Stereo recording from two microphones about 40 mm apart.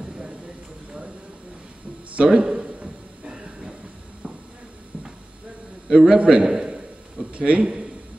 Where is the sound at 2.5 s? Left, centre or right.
Right.